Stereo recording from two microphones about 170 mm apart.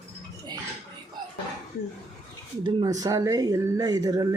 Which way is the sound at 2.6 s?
25° right (ahead or behind).